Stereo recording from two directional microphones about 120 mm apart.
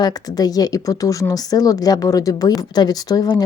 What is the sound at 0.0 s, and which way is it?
A woman's voice, 30° left (ahead or behind).